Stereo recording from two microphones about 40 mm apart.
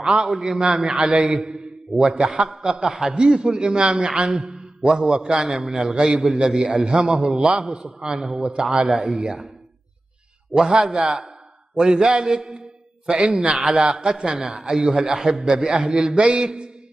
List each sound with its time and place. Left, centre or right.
0.0 s a man's voice: right
1.2 s a man's voice: centre
6.0 s a man's voice: centre
7.7 s a man's voice: centre
10.5 s a man's voice: right
16.2 s a man's voice: right